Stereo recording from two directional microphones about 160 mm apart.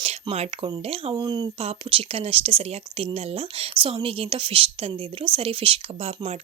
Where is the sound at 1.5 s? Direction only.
35° right (ahead or behind).